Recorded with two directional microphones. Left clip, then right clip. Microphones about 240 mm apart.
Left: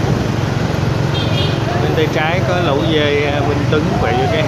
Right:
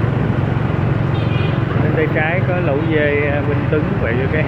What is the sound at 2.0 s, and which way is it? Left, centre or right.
Vehicle, centre.